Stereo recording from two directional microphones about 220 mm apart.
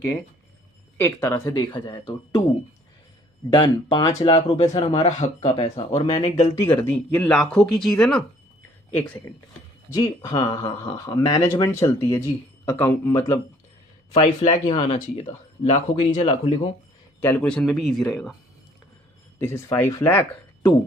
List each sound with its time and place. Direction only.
0.9 s speech: 10° left (ahead or behind)
3.5 s speech: 20° left (ahead or behind)
6.6 s speech: 10° left (ahead or behind)
14.1 s speech: 30° left (ahead or behind)
17.2 s speech: 10° left (ahead or behind)
19.4 s speech: 10° left (ahead or behind)